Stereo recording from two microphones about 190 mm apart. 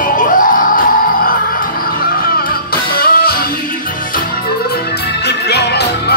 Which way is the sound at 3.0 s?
50° left (ahead or behind).